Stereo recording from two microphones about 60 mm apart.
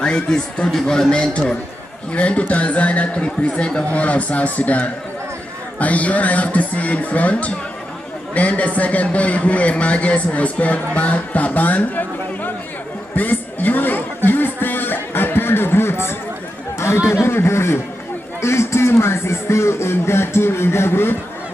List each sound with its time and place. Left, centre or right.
0.0 s a man's voice: centre
13.1 s a sound: left
16.7 s speech: left